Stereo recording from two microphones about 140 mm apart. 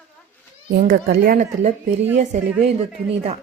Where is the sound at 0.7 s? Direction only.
90° right.